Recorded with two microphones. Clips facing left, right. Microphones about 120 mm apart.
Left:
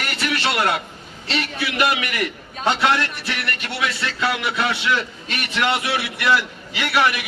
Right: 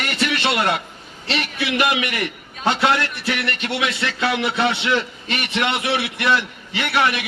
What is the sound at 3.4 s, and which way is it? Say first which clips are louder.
A man's voice: right 2 dB; 20° right (ahead or behind).